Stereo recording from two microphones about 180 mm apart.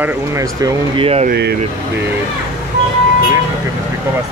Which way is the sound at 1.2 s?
65° right (ahead or behind).